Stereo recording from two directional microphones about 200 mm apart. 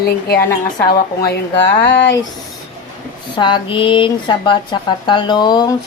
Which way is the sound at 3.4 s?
25° left (ahead or behind).